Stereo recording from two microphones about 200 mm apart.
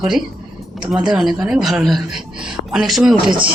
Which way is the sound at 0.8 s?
5° right (ahead or behind).